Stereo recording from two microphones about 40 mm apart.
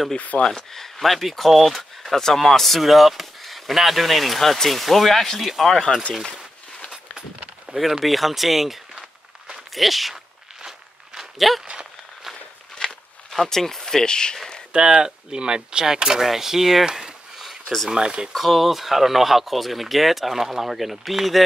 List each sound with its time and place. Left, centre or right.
0.4 s speech: centre
2.1 s speech: centre
7.7 s speech: centre
11.1 s a sound: centre
11.6 s a sound: right
12.8 s walk: left
13.3 s speech: centre
14.7 s speech: right
16.8 s a sound: centre
17.8 s speech: centre
18.3 s speech: centre